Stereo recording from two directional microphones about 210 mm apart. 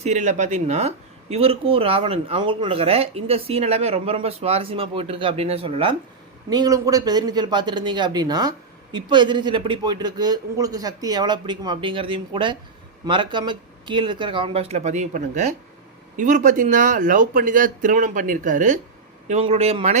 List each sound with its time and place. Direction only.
0.0 s speech: 35° right (ahead or behind)